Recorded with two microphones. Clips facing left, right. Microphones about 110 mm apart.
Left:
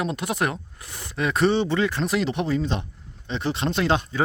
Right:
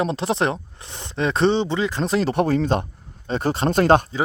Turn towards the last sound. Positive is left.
turn(degrees=-45)  # may be behind; listen again after turning